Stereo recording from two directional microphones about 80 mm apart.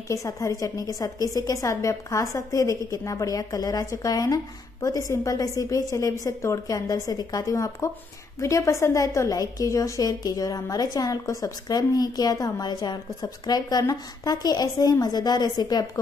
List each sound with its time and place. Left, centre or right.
0.1 s a woman's voice: left